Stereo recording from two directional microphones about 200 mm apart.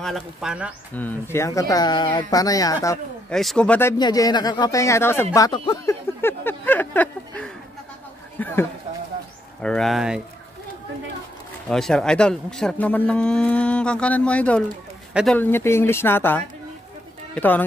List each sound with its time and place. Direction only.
0.0 s speech: centre (ahead or behind)
0.9 s speech: 10° left (ahead or behind)
3.3 s speech: 5° left (ahead or behind)
4.0 s speech: 20° left (ahead or behind)
8.4 s a sound: 10° left (ahead or behind)
9.6 s speech: 5° left (ahead or behind)
11.7 s speech: 5° left (ahead or behind)